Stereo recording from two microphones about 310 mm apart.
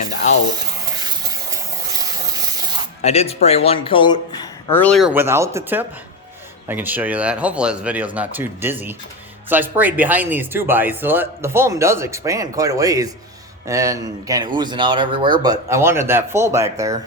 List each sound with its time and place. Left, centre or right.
0.0 s frying: left
0.9 s spray: centre
3.0 s speech: centre